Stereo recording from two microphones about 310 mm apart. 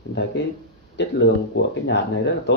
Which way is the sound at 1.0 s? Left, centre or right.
Left.